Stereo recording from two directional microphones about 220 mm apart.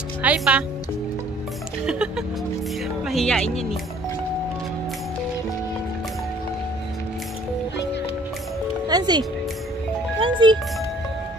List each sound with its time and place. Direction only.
0.2 s speech: 5° right (ahead or behind)
1.9 s speech: 5° right (ahead or behind)
8.8 s speech: 20° right (ahead or behind)
10.2 s speech: 20° right (ahead or behind)